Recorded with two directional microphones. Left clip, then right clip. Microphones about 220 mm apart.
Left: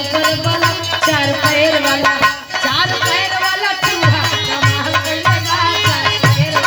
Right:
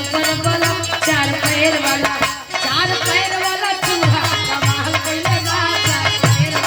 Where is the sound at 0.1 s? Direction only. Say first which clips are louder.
Left 2 dB; 10° left (ahead or behind).